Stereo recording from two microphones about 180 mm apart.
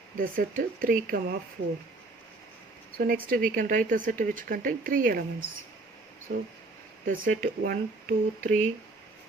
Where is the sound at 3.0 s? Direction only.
55° right (ahead or behind).